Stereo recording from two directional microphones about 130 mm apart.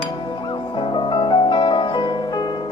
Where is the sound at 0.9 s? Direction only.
40° left (ahead or behind).